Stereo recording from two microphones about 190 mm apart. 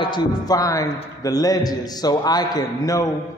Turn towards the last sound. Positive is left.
turn(degrees=20)  # may be behind; listen again after turning